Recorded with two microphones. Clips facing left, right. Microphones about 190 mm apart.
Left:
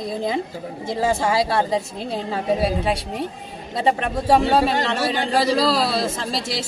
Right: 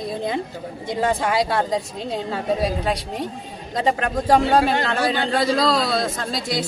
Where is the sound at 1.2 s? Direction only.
30° left (ahead or behind).